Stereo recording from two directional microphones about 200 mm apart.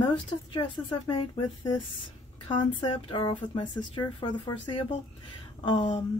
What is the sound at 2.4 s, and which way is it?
A woman's voice, 25° left (ahead or behind).